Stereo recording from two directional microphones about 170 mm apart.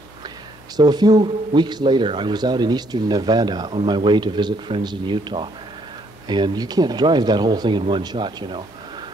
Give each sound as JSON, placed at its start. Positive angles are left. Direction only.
{"t": 0.7, "sound": "a man's voice", "side_deg": -25}